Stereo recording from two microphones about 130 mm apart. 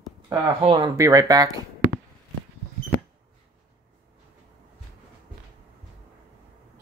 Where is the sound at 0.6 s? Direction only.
45° right (ahead or behind).